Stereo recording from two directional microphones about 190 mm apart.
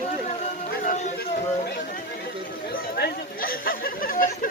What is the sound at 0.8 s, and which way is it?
Speech, 40° left (ahead or behind).